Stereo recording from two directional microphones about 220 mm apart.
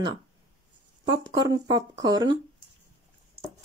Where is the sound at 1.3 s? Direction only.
20° right (ahead or behind).